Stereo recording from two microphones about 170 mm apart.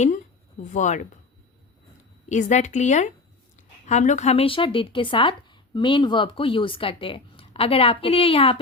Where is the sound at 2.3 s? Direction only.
45° left (ahead or behind).